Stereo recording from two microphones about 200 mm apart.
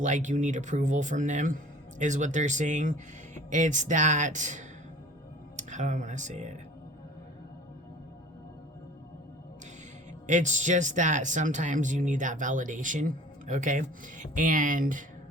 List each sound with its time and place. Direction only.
0.0 s speech: 35° right (ahead or behind)
10.2 s speech: 40° right (ahead or behind)